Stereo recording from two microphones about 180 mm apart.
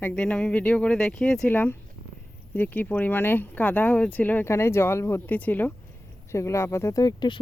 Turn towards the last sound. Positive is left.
turn(degrees=25)  # may be behind; listen again after turning